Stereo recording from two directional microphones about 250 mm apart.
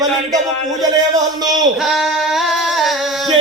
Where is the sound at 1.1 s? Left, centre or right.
Centre.